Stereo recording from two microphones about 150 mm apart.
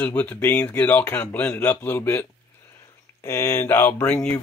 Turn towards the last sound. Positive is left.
turn(degrees=10)  # may be behind; listen again after turning